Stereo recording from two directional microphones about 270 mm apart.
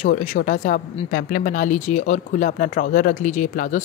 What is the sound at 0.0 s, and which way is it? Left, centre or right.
A woman's voice, left.